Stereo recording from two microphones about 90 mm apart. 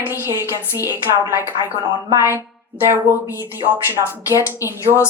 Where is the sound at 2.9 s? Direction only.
30° right (ahead or behind).